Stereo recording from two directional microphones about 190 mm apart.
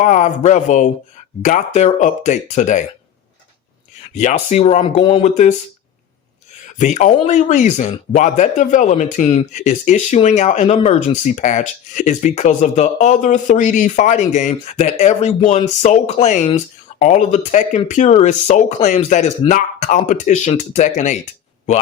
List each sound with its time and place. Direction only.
0.0 s speech: 40° left (ahead or behind)
4.1 s speech: 40° left (ahead or behind)
6.7 s speech: 40° left (ahead or behind)